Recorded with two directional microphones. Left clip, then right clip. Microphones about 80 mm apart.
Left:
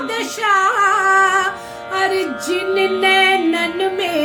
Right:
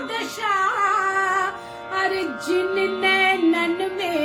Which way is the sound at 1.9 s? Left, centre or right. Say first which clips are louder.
Left 5 dB; left.